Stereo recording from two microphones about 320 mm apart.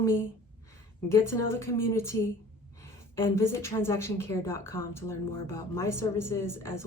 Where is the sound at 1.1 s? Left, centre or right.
Centre.